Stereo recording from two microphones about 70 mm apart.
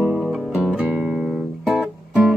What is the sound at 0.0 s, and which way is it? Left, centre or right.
Music, centre.